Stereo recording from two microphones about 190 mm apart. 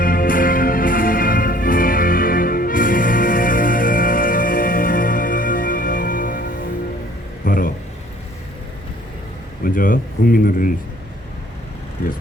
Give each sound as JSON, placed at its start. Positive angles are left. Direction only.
{"t": 0.0, "sound": "music", "side_deg": 45}
{"t": 7.4, "sound": "a sound", "side_deg": 45}
{"t": 9.7, "sound": "speech", "side_deg": 45}